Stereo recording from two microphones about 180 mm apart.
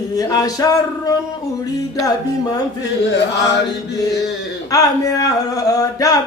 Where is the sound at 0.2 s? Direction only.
20° left (ahead or behind).